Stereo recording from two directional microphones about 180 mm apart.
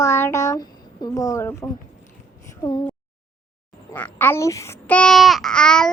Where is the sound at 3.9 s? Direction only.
10° left (ahead or behind).